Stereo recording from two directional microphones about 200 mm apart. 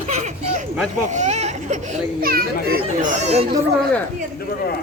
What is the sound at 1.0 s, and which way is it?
A child's voice, 35° right (ahead or behind).